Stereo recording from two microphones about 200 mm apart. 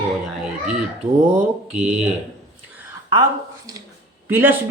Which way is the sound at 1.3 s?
5° right (ahead or behind).